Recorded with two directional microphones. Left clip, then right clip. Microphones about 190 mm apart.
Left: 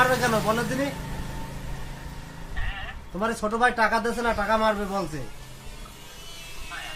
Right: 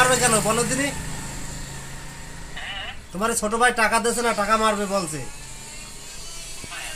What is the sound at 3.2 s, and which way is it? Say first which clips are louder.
Speech: right 3 dB; 45° right (ahead or behind).